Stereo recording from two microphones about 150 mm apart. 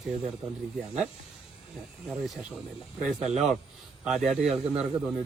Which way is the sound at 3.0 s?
50° right (ahead or behind).